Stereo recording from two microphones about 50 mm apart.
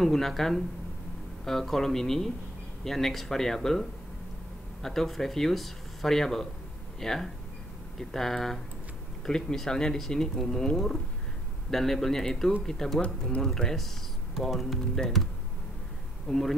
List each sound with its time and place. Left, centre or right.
0.0 s speech: centre
4.8 s speech: centre
15.0 s speech: centre
16.3 s speech: centre